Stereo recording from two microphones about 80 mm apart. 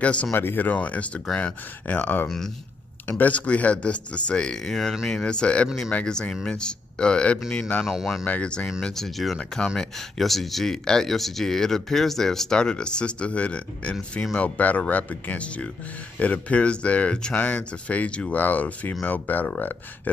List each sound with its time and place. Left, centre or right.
0.0 s speech: centre
0.3 s speech: left
2.2 s speech: centre
3.1 s speech: left
7.8 s speech: centre
8.3 s speech: centre